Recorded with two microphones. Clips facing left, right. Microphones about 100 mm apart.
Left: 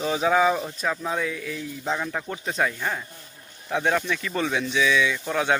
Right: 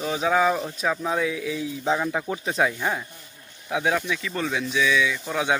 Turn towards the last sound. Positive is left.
turn(degrees=-5)  # may be behind; listen again after turning